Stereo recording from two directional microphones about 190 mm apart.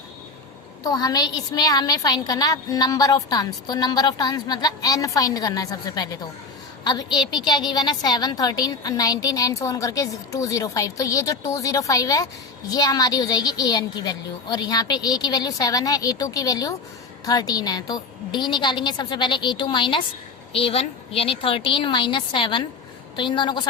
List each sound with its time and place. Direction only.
0.9 s a woman's voice: 20° left (ahead or behind)